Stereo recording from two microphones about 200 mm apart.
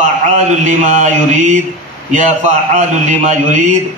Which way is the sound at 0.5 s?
40° right (ahead or behind).